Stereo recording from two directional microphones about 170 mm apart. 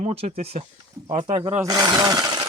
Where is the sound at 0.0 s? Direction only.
40° right (ahead or behind).